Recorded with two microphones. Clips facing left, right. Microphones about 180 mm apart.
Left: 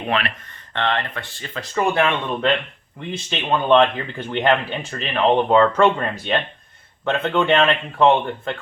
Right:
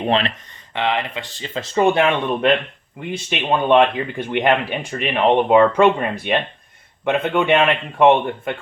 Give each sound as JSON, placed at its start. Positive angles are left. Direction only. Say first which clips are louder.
{"t": 0.0, "sound": "speech", "louder": "right 4 dB", "side_deg": -25}
{"t": 0.7, "sound": "speech", "louder": "right 2 dB", "side_deg": -10}
{"t": 3.0, "sound": "speech", "louder": "right 2 dB", "side_deg": -10}